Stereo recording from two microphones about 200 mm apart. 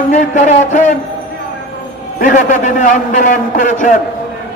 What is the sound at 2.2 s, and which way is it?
A man's voice, 40° left (ahead or behind).